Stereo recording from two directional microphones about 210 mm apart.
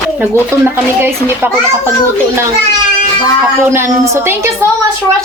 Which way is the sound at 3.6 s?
15° right (ahead or behind).